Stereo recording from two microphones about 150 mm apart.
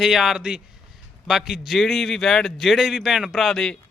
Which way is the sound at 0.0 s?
Centre (ahead or behind).